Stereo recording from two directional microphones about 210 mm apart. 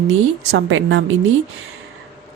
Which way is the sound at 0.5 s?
65° right (ahead or behind).